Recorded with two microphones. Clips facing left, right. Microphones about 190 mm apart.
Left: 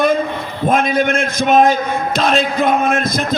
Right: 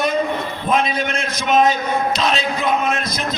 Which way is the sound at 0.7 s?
50° left (ahead or behind).